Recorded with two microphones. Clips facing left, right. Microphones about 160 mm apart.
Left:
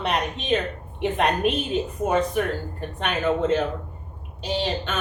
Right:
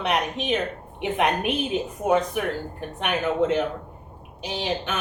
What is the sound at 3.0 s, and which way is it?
A woman's voice, 10° right (ahead or behind).